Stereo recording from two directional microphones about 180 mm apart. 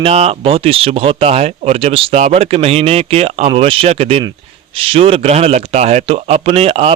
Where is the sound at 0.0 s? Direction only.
35° right (ahead or behind).